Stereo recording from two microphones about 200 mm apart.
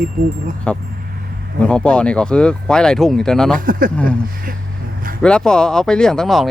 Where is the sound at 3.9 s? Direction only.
5° left (ahead or behind).